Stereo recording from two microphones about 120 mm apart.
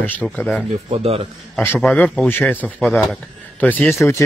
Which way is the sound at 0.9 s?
55° right (ahead or behind).